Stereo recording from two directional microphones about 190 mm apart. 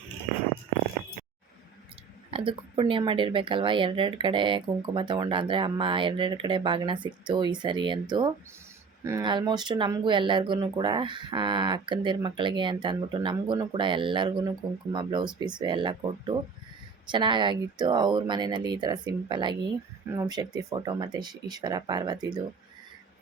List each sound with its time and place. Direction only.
2.3 s speech: 30° right (ahead or behind)